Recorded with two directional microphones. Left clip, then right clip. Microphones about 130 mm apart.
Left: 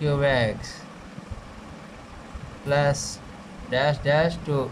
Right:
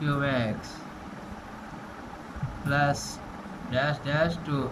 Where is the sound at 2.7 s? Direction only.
40° left (ahead or behind).